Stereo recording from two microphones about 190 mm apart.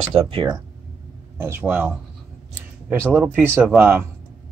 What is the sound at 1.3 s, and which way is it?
Speech, 10° right (ahead or behind).